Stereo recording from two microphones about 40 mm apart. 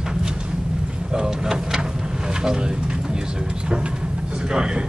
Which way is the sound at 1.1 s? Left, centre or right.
Centre.